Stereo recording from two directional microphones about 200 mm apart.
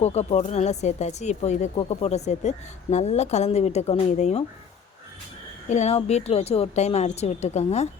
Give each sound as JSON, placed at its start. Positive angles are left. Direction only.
{"t": 0.0, "sound": "speech", "side_deg": 30}
{"t": 5.6, "sound": "speech", "side_deg": 35}